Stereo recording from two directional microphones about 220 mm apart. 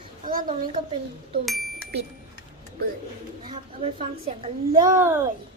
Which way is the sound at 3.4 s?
25° right (ahead or behind).